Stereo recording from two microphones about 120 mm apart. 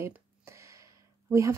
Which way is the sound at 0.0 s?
25° right (ahead or behind).